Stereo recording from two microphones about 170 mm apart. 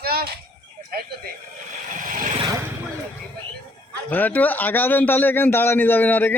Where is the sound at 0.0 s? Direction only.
65° right (ahead or behind).